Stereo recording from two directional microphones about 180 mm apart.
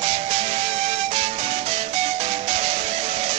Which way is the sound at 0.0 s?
35° right (ahead or behind).